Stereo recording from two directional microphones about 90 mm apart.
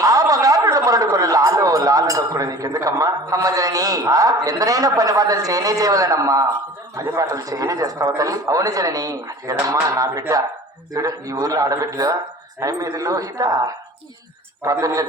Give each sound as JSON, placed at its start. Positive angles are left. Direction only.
{"t": 0.0, "sound": "a man's voice", "side_deg": -40}